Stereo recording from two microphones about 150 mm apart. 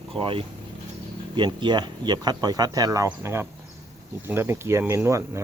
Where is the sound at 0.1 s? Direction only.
35° right (ahead or behind).